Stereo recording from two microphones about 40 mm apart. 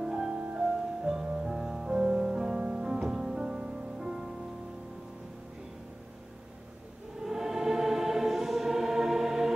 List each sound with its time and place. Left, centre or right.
0.0 s music: centre
7.2 s choir: centre